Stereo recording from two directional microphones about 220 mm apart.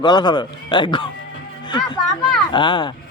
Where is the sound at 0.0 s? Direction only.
20° left (ahead or behind).